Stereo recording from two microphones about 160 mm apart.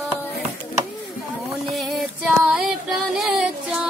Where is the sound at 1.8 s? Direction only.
Centre (ahead or behind).